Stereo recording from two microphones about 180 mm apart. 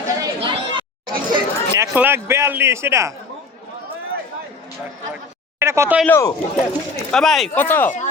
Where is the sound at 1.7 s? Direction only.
10° right (ahead or behind).